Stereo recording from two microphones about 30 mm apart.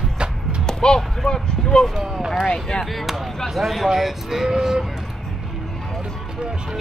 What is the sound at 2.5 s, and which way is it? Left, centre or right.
Chop, centre.